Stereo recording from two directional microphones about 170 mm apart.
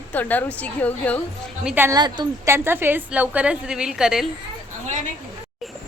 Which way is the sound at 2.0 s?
25° right (ahead or behind).